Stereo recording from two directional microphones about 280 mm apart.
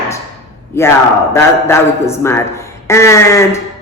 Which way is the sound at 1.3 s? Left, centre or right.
Centre.